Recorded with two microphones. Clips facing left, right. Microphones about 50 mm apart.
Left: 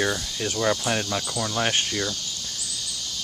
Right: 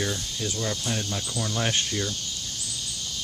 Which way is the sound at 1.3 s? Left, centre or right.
Left.